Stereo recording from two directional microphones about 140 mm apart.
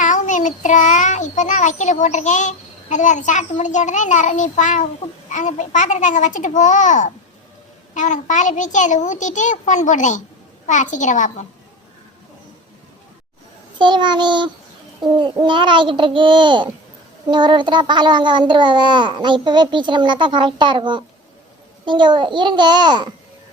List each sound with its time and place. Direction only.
0.0 s child singing: 65° left (ahead or behind)
13.7 s a child's voice: 35° right (ahead or behind)